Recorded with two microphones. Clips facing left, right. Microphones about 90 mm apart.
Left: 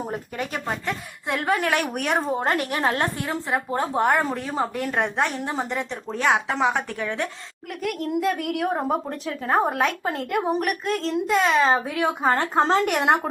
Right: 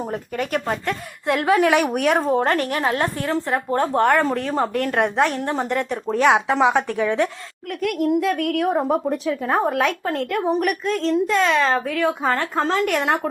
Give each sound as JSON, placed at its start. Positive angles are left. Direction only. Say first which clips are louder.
{"t": 0.1, "sound": "speech", "louder": "right 5 dB", "side_deg": 5}
{"t": 2.4, "sound": "a woman's voice", "louder": "right 3 dB", "side_deg": 15}
{"t": 2.8, "sound": "a woman's voice", "louder": "even", "side_deg": 35}
{"t": 3.4, "sound": "a woman's voice", "louder": "right 1 dB", "side_deg": 5}
{"t": 4.9, "sound": "a woman's voice", "louder": "right 4 dB", "side_deg": 0}